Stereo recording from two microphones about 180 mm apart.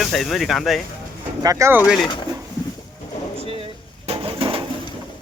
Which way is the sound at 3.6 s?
30° right (ahead or behind).